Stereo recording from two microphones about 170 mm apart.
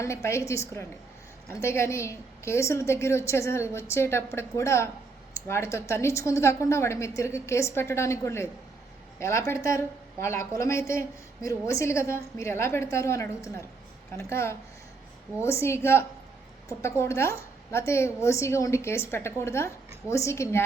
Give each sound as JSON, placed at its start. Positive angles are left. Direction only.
{"t": 0.0, "sound": "a woman's voice", "side_deg": 15}